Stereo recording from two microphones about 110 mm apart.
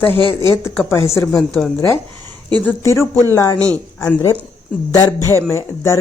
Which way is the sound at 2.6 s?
25° left (ahead or behind).